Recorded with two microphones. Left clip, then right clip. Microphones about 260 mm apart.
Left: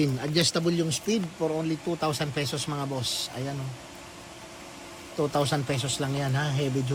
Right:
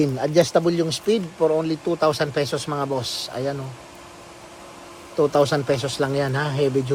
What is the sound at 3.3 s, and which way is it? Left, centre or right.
Speech, right.